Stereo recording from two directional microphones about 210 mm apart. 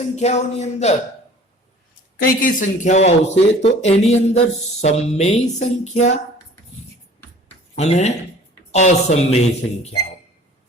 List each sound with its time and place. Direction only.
0.2 s speech: 30° left (ahead or behind)
2.2 s speech: 40° left (ahead or behind)
7.8 s speech: 30° left (ahead or behind)